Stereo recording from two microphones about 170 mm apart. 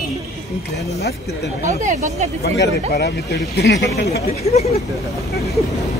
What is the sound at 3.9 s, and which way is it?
Speech, 75° left (ahead or behind).